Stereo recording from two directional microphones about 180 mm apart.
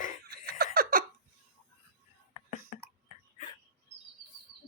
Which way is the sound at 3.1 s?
45° left (ahead or behind).